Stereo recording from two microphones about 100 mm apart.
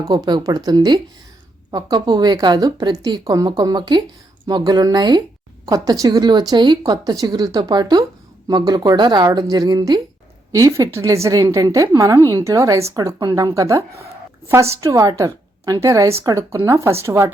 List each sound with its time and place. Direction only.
0.0 s a woman's voice: 40° right (ahead or behind)
10.5 s a woman's voice: 30° right (ahead or behind)